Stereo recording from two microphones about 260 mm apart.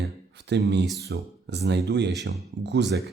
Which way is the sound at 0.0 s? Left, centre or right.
Right.